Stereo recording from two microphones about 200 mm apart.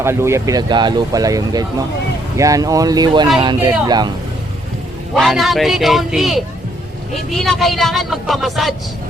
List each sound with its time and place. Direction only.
0.0 s speech: 15° right (ahead or behind)
5.1 s speech: centre (ahead or behind)